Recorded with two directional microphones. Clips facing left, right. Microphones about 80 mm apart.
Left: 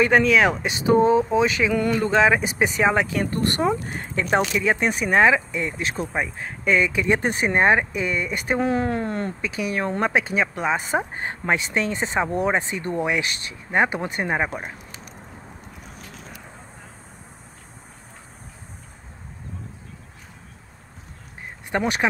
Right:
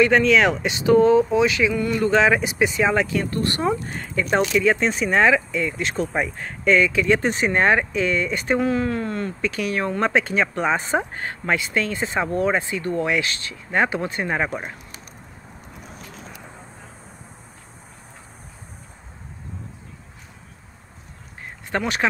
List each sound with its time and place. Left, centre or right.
0.1 s speech: centre; by 1.7 s left
1.7 s speech: left
2.0 s speech: centre
2.4 s speech: left
2.8 s speech: left
9.4 s speech: centre
11.1 s speech: left
21.6 s speech: centre